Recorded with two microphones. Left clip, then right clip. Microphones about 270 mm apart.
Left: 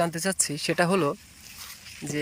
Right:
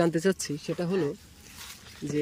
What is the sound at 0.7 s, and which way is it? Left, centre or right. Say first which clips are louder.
Speech: left 7 dB; left.